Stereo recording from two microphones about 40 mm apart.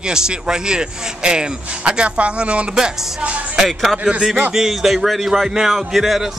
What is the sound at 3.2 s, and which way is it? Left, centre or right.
Speech, right.